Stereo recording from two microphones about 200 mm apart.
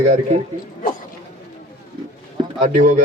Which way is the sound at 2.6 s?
40° right (ahead or behind).